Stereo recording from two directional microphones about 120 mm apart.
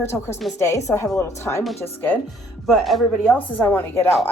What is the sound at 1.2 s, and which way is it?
Speech, 25° left (ahead or behind).